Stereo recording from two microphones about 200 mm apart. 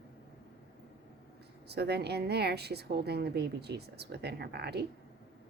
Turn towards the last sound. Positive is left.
turn(degrees=-55)  # may be behind; listen again after turning